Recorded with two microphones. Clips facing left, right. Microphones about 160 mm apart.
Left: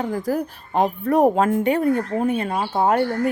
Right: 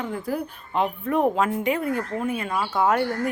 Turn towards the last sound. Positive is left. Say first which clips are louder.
# left 3 dB
turn(degrees=30)  # may be behind; listen again after turning